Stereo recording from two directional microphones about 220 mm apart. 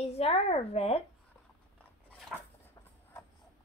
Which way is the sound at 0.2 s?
25° left (ahead or behind).